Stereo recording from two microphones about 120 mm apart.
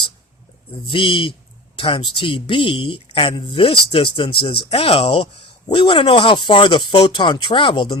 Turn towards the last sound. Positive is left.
turn(degrees=45)  # may be behind; listen again after turning